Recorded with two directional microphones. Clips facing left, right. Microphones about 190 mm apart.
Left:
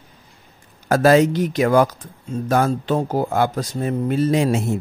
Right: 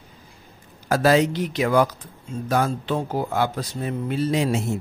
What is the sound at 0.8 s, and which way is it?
Speech, 50° left (ahead or behind).